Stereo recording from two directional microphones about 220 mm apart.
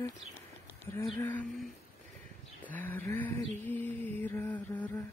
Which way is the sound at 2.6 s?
10° left (ahead or behind).